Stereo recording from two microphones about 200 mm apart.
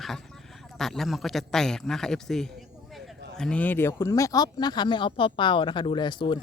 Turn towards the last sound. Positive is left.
turn(degrees=25)  # may be behind; listen again after turning